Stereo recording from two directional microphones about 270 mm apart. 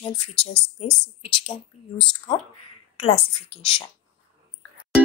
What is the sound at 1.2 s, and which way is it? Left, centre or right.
Speech, left.